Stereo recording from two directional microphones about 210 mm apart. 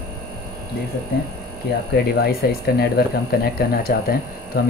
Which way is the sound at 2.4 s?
45° left (ahead or behind).